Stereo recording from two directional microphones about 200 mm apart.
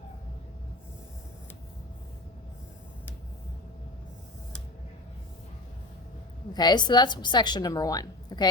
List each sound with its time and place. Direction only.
6.5 s a woman's voice: 20° left (ahead or behind)